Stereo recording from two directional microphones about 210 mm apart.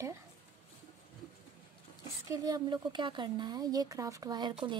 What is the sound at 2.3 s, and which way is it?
Speech, 20° right (ahead or behind).